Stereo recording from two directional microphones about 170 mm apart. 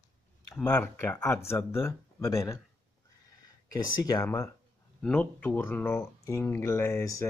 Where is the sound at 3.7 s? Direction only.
20° left (ahead or behind).